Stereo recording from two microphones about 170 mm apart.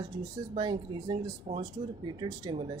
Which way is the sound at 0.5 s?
30° right (ahead or behind).